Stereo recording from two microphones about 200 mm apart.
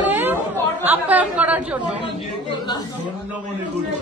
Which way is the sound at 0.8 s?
10° right (ahead or behind).